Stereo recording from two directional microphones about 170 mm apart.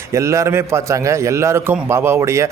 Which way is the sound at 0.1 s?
15° right (ahead or behind).